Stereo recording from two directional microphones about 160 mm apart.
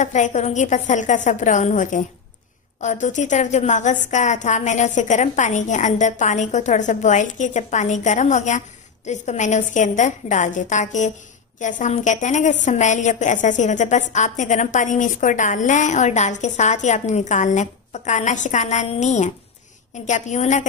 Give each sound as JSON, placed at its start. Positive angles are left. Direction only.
{"t": 0.0, "sound": "a woman's voice", "side_deg": 50}